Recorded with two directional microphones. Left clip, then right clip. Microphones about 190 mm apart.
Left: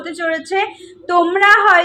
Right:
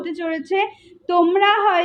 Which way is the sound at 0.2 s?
15° left (ahead or behind).